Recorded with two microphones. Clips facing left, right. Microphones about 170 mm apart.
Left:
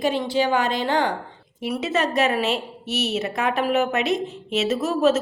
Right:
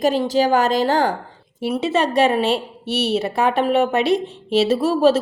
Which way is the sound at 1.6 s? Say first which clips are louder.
Right 4 dB; 30° right (ahead or behind).